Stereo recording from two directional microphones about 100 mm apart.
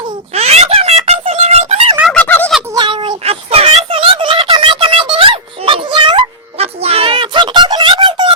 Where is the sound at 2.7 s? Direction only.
55° right (ahead or behind).